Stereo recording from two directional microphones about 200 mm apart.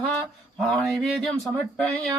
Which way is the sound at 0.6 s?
5° left (ahead or behind).